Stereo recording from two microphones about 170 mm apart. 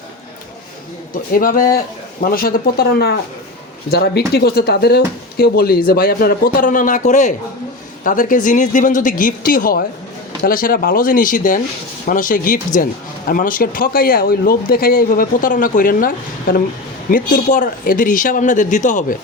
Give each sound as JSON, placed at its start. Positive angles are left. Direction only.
{"t": 1.3, "sound": "speech", "side_deg": 55}